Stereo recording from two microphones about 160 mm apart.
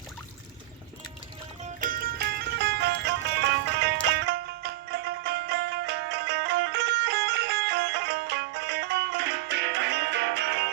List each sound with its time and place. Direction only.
1.6 s music: 60° right (ahead or behind); by 10.7 s 90° right